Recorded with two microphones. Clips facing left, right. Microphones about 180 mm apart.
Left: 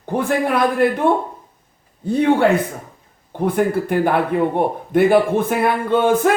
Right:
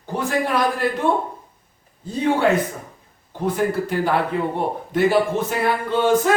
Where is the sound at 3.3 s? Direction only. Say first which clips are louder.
Left 3 dB; 55° left (ahead or behind).